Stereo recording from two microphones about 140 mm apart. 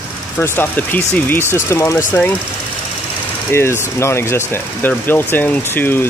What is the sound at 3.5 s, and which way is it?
Speech, 15° left (ahead or behind).